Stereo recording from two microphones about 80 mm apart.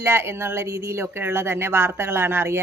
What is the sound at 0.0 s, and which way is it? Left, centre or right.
Speech, right.